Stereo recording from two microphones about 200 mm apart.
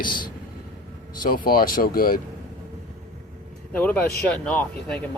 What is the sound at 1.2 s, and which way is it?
Speech, 45° left (ahead or behind).